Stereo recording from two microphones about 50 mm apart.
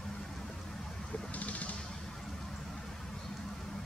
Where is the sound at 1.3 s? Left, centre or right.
Left.